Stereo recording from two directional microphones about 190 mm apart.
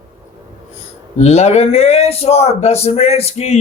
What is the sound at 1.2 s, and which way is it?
A man's voice, 35° left (ahead or behind).